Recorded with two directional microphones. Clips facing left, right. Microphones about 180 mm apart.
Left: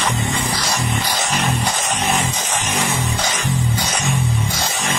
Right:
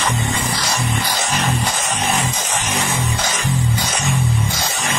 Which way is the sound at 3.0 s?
15° left (ahead or behind).